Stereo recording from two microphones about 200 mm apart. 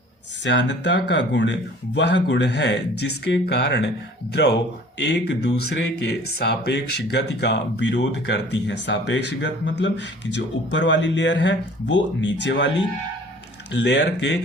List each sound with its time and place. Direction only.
0.4 s speech: 60° left (ahead or behind)